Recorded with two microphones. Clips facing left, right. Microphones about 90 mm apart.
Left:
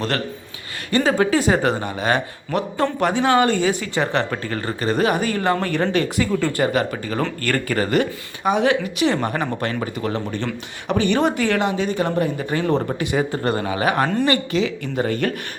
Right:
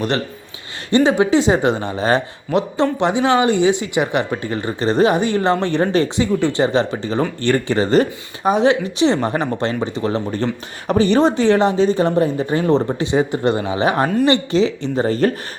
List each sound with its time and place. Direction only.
0.9 s speech: 20° right (ahead or behind)